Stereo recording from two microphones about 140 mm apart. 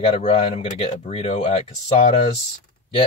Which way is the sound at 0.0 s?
50° left (ahead or behind).